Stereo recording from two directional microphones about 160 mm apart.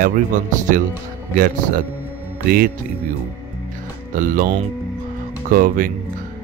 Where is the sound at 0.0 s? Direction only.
55° right (ahead or behind).